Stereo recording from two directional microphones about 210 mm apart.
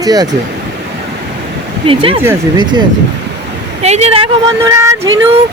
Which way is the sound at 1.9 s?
25° right (ahead or behind).